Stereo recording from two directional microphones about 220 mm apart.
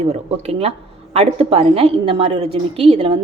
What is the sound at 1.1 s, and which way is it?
A woman's voice, 25° right (ahead or behind).